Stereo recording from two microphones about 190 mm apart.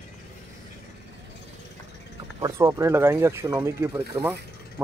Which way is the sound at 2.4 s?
15° right (ahead or behind).